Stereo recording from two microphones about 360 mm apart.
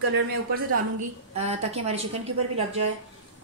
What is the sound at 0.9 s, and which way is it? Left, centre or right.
A woman's voice, centre.